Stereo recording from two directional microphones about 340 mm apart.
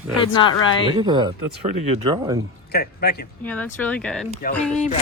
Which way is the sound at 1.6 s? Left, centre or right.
Right.